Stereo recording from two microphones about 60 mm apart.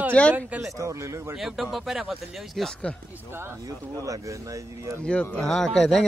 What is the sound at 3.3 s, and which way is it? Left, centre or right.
Speech, right.